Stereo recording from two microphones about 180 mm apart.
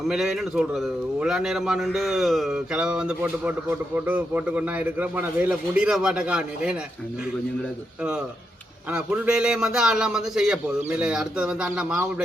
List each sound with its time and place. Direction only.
0.1 s a man's voice: centre (ahead or behind)
8.9 s a man's voice: 5° right (ahead or behind)